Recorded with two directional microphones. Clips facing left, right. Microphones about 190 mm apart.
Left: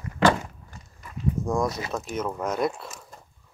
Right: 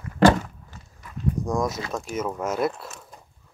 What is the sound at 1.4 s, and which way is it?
Speech, centre (ahead or behind).